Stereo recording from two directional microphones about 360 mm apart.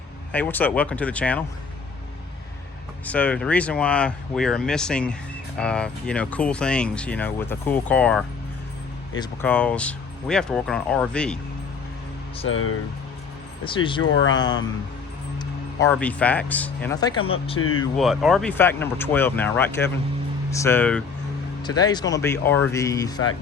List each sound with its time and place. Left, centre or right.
0.3 s speech: centre
3.1 s speech: centre
12.5 s speech: left
13.7 s speech: centre
14.0 s speech: left
14.3 s speech: centre
17.2 s speech: left
17.9 s speech: centre